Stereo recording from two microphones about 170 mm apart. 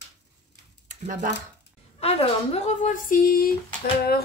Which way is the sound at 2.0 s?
35° left (ahead or behind).